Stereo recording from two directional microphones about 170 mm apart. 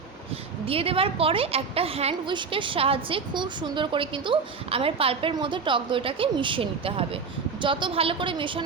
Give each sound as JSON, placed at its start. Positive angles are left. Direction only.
{"t": 0.6, "sound": "a woman's voice", "side_deg": -35}